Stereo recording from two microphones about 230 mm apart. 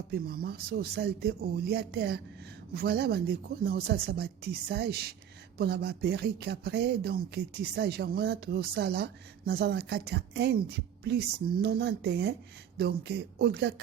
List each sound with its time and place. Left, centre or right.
0.1 s speech: right